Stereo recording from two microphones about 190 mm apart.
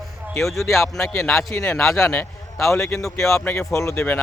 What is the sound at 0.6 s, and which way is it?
A man's voice, 15° left (ahead or behind).